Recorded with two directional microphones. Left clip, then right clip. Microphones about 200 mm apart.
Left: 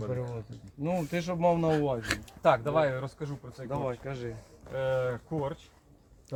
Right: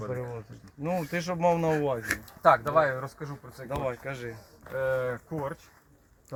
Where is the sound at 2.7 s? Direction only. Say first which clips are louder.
Right 3 dB; 5° left (ahead or behind).